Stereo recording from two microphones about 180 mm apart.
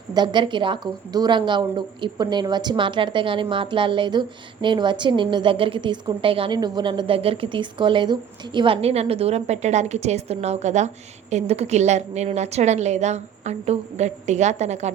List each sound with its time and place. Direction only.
0.1 s a woman's voice: 25° right (ahead or behind); by 14.8 s 40° right (ahead or behind)